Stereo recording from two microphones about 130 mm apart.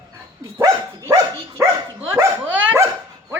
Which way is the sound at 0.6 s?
25° right (ahead or behind).